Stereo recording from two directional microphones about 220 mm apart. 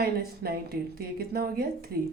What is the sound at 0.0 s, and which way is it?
A woman's voice, 45° right (ahead or behind).